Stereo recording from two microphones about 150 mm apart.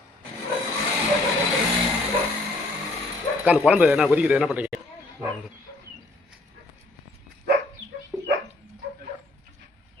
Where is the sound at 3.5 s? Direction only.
10° right (ahead or behind).